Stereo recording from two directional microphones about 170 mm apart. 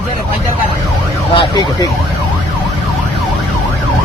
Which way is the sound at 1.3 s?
30° left (ahead or behind).